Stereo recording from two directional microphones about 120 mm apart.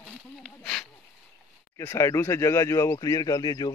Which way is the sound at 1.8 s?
25° left (ahead or behind).